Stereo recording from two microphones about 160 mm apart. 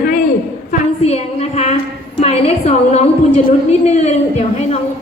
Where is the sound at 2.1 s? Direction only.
40° left (ahead or behind).